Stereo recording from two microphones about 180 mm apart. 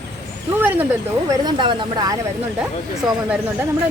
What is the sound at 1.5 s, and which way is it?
Speech, 25° right (ahead or behind).